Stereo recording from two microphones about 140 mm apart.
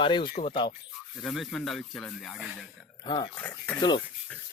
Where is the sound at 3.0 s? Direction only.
35° left (ahead or behind).